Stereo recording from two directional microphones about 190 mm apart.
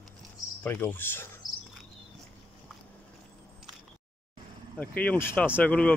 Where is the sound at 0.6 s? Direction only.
10° left (ahead or behind).